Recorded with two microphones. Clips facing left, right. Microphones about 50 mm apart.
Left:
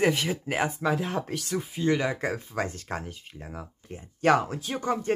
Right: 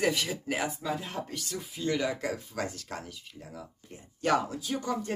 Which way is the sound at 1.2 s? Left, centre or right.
Left.